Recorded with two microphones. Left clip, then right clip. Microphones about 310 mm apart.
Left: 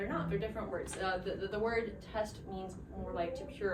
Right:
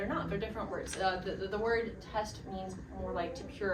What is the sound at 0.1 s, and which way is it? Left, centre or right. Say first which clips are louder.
Music: right 1 dB; centre.